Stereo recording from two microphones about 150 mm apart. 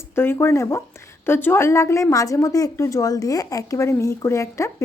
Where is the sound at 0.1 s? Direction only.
15° left (ahead or behind).